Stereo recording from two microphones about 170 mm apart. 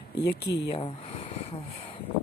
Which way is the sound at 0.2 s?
80° left.